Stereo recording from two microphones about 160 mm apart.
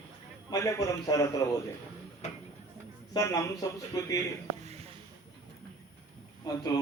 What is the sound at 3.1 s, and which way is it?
A man's voice, 20° left (ahead or behind).